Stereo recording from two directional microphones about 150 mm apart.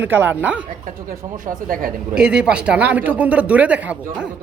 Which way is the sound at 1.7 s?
70° right (ahead or behind).